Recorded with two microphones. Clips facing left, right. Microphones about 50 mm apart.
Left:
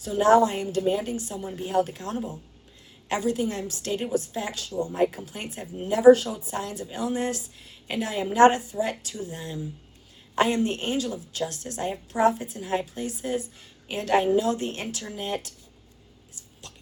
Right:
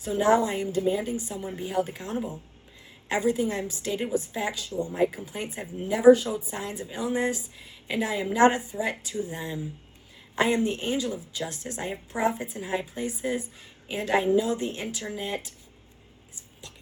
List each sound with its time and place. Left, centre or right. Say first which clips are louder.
0.0 s a woman's voice: left 3 dB; right
10.7 s speech: even; left
11.0 s a woman's voice: left 1 dB; right